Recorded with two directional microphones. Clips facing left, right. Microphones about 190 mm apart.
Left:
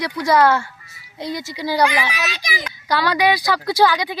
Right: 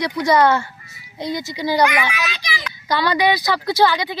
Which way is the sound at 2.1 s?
40° left (ahead or behind).